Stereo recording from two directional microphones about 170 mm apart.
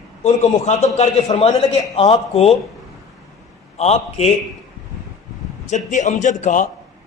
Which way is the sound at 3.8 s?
40° left (ahead or behind).